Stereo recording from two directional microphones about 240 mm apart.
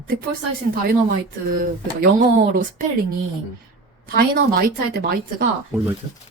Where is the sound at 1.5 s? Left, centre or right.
Right.